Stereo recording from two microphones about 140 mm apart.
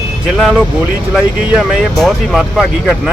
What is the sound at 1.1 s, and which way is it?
Speech, centre (ahead or behind).